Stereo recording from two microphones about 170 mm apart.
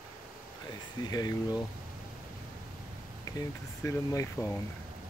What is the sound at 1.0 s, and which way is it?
Speech, 20° left (ahead or behind).